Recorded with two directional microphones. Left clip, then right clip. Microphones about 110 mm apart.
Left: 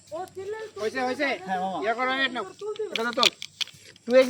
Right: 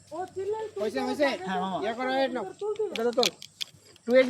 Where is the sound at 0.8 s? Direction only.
10° left (ahead or behind).